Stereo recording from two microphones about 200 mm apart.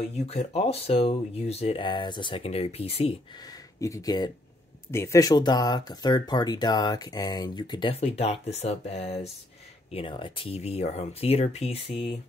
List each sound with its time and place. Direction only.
0.2 s speech: 35° left (ahead or behind)
3.8 s speech: 15° left (ahead or behind)